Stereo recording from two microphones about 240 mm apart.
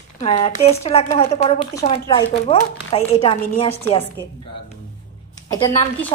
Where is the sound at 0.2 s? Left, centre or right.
Left.